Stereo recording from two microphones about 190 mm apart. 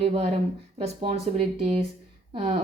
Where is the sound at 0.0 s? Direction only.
30° right (ahead or behind).